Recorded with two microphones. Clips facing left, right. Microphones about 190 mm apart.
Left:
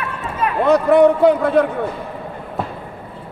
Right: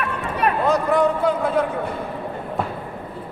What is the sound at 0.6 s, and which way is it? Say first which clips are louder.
Speech: left 8 dB; 65° left (ahead or behind).